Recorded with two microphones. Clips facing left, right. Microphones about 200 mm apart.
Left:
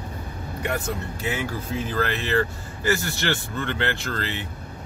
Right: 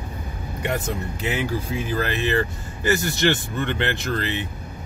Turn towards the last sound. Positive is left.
turn(degrees=-20)  # may be behind; listen again after turning